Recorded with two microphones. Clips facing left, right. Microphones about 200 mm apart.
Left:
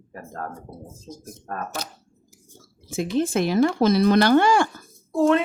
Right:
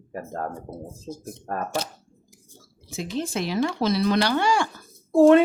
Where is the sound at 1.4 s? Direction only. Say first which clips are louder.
Right 2 dB; 35° right (ahead or behind).